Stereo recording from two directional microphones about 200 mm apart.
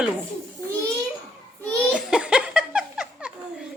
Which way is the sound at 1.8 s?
5° right (ahead or behind).